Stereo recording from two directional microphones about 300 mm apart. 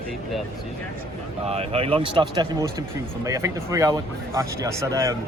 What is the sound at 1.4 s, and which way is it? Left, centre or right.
Speech, centre.